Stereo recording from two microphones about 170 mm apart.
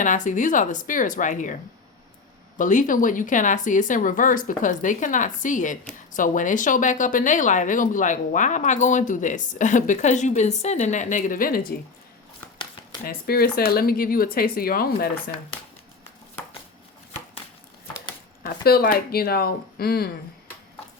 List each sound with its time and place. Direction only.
0.0 s speech: 50° left (ahead or behind)
2.6 s speech: 50° left (ahead or behind)
13.1 s speech: 65° left (ahead or behind)
18.4 s speech: 60° left (ahead or behind)